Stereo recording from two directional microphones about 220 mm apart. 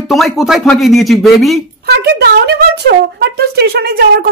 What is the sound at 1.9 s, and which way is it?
A woman's voice, 50° right (ahead or behind).